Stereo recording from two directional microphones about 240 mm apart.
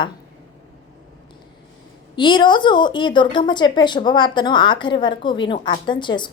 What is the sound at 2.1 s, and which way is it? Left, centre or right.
A woman's voice, centre.